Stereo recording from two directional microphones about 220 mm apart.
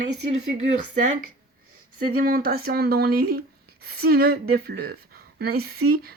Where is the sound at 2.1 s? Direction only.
40° right (ahead or behind).